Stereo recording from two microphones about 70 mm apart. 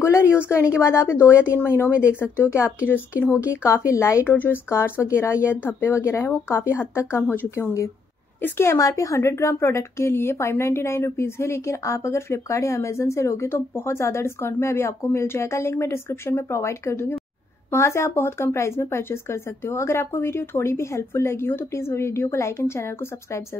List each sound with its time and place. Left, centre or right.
0.0 s speech: left